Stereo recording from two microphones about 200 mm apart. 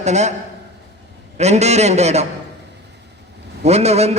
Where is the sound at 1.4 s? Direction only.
35° right (ahead or behind).